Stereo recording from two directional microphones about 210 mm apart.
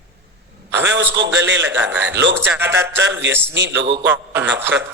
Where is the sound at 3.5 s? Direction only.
60° right (ahead or behind).